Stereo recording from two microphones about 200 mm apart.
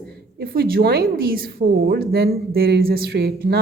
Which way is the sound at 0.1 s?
50° right (ahead or behind).